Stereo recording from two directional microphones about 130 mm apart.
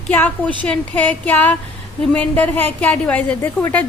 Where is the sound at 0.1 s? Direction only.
15° left (ahead or behind).